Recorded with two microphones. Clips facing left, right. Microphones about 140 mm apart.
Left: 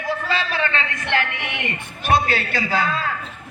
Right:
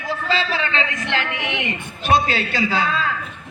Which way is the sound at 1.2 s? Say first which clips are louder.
Even; 20° right (ahead or behind).